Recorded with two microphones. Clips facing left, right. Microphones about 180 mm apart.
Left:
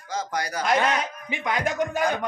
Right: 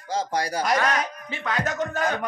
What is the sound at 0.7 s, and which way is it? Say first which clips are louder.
Speech: left 3 dB; 20° left (ahead or behind).